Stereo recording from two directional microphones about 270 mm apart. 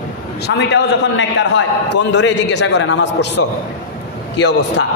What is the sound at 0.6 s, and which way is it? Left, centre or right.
A man's voice, left.